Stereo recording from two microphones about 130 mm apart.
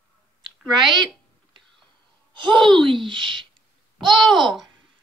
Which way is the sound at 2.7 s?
5° left (ahead or behind).